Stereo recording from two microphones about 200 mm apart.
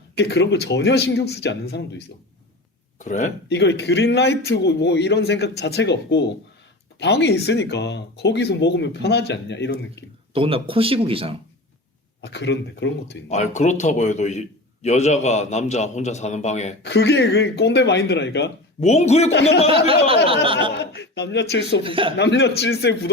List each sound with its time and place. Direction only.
0.2 s speech: 60° left (ahead or behind)
3.0 s a man's voice: 35° left (ahead or behind)
3.5 s speech: 60° left (ahead or behind)
10.3 s speech: 25° right (ahead or behind)
12.2 s speech: 60° left (ahead or behind)
13.2 s a man's voice: 35° left (ahead or behind)
16.8 s speech: 60° left (ahead or behind)
18.8 s a man's voice: 35° left (ahead or behind)
19.3 s speech: 65° left (ahead or behind)
20.2 s speech: 30° right (ahead or behind)
20.7 s speech: 60° left (ahead or behind)
21.8 s speech: 25° right (ahead or behind)
22.2 s speech: 60° left (ahead or behind)